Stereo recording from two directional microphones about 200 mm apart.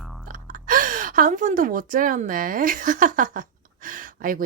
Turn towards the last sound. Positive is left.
turn(degrees=-45)  # may be behind; listen again after turning